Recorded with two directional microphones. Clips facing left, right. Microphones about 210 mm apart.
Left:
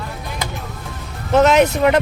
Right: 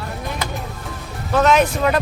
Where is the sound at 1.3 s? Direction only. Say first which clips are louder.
Left 3 dB; 20° left (ahead or behind).